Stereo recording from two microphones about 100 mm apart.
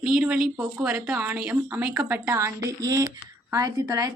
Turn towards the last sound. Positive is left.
turn(degrees=-40)  # may be behind; listen again after turning